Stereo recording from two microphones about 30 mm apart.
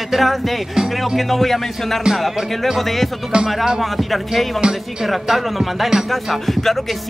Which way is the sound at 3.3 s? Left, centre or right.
Right.